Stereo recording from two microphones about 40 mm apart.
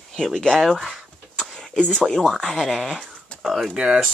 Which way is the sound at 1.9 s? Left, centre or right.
Centre.